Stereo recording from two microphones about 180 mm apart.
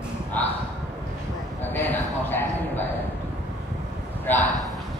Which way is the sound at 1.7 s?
10° left (ahead or behind).